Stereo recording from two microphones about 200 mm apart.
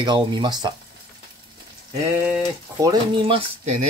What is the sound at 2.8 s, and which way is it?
Speech, 25° right (ahead or behind).